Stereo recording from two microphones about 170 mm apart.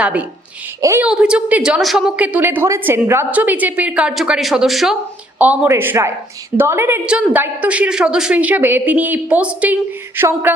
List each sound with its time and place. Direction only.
0.0 s a woman's voice: 5° right (ahead or behind)
1.0 s a woman's voice: 5° right (ahead or behind)